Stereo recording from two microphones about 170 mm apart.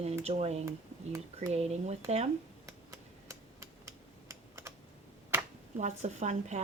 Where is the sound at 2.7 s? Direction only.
20° right (ahead or behind).